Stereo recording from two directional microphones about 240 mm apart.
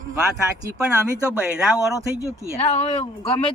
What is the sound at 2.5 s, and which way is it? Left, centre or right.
Speech, left.